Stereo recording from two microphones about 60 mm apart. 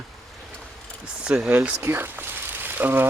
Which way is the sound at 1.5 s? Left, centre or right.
Right.